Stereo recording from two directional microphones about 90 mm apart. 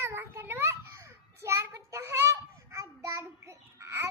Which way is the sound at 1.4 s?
30° right (ahead or behind).